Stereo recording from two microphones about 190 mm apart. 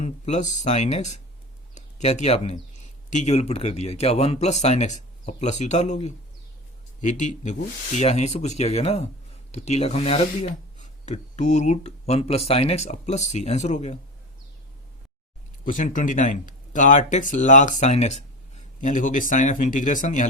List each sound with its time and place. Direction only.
0.0 s speech: 40° left (ahead or behind)
15.6 s speech: 45° left (ahead or behind)